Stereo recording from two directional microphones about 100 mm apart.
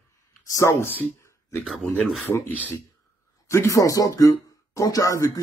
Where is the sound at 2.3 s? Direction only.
5° right (ahead or behind).